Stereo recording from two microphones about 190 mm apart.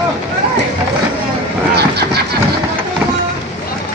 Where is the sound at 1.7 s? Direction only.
60° right (ahead or behind).